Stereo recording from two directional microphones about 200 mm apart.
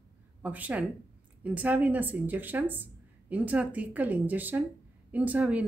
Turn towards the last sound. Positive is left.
turn(degrees=-5)  # may be behind; listen again after turning